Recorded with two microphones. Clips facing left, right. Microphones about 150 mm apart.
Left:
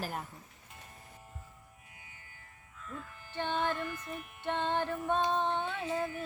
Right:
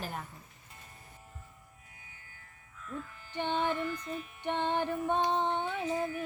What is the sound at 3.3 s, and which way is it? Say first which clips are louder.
Music: right 2 dB; 15° right (ahead or behind).